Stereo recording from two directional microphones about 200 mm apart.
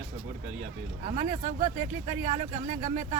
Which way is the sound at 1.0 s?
40° right (ahead or behind).